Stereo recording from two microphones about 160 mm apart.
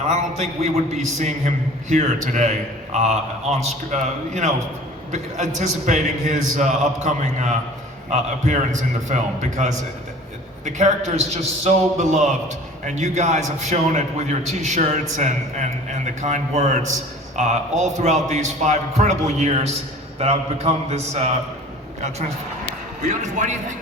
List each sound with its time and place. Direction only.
0.1 s a man's voice: 45° right (ahead or behind)
5.5 s a man's voice: 50° right (ahead or behind)
23.0 s a man's voice: 50° right (ahead or behind)